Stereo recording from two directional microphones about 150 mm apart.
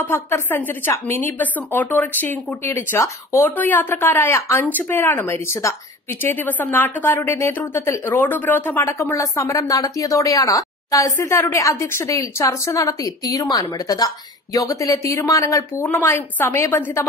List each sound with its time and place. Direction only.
0.1 s a woman's voice: 15° left (ahead or behind)